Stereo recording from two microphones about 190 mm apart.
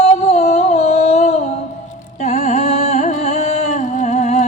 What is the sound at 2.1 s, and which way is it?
Music, 35° left (ahead or behind).